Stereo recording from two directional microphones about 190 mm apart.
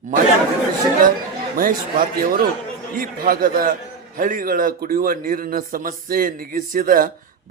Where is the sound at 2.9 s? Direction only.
50° right (ahead or behind).